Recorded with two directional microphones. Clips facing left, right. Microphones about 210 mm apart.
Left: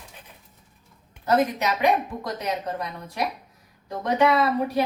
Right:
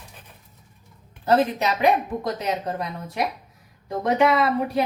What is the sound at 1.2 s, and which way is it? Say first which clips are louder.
A woman's voice: right 2 dB; 30° right (ahead or behind).